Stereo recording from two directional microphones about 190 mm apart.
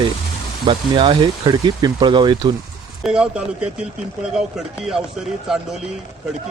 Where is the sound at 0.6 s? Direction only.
25° right (ahead or behind).